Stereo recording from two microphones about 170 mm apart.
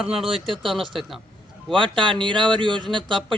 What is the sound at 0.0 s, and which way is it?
Speech, centre (ahead or behind).